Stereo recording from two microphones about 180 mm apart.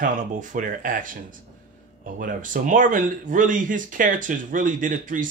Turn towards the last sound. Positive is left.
turn(degrees=-45)  # may be behind; listen again after turning